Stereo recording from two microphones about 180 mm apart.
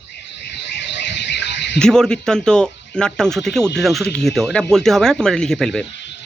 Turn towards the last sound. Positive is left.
turn(degrees=5)  # may be behind; listen again after turning